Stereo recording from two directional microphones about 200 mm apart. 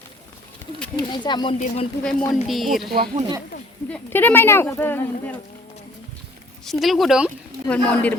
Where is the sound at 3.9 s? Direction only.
10° left (ahead or behind).